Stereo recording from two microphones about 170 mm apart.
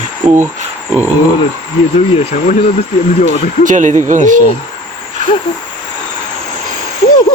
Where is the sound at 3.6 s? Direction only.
50° right (ahead or behind).